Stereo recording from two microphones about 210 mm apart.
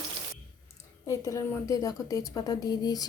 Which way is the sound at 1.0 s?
15° left (ahead or behind).